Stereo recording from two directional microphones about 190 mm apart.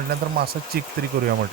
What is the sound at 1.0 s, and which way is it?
Speech, 55° right (ahead or behind).